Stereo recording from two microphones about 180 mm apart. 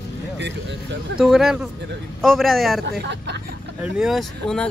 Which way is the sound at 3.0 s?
70° right (ahead or behind).